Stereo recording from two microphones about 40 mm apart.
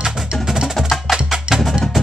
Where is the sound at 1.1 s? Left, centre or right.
Centre.